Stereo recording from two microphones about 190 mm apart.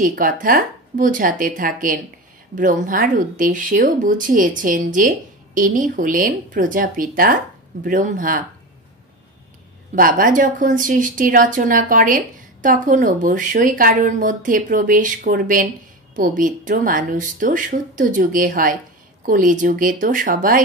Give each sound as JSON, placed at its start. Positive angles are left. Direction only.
{"t": 0.0, "sound": "speech", "side_deg": -45}
{"t": 9.9, "sound": "speech", "side_deg": -45}